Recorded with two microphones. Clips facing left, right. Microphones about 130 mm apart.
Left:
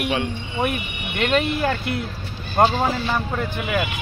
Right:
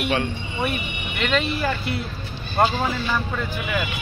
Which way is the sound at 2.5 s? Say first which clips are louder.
Left 3 dB; 40° left (ahead or behind).